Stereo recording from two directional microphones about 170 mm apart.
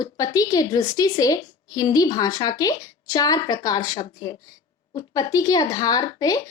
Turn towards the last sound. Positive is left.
turn(degrees=20)  # may be behind; listen again after turning